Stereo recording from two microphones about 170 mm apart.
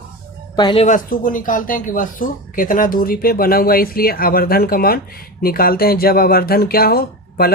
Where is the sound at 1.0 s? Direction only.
55° left (ahead or behind).